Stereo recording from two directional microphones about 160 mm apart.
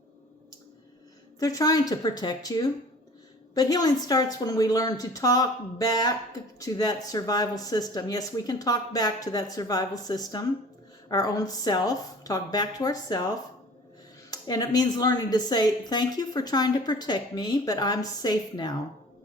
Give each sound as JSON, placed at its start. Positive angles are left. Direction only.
{"t": 1.4, "sound": "a woman's voice", "side_deg": 20}